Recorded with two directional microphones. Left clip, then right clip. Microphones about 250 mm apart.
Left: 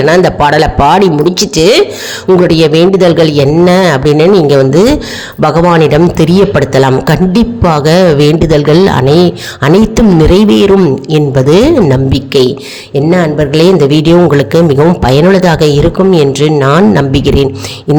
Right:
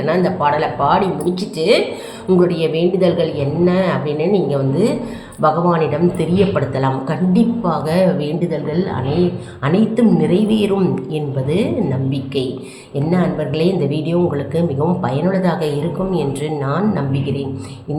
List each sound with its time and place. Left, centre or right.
0.0 s a man's voice: left